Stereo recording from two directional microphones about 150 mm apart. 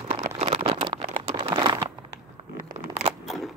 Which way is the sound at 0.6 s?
35° right (ahead or behind).